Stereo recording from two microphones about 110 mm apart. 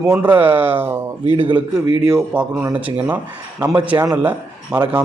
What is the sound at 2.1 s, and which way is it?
A man's voice, 10° right (ahead or behind).